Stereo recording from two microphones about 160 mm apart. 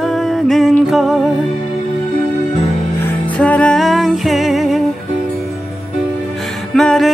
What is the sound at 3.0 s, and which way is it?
Music, 10° left (ahead or behind).